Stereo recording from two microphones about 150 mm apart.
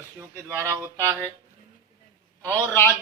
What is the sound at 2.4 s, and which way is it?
Speech, 15° left (ahead or behind).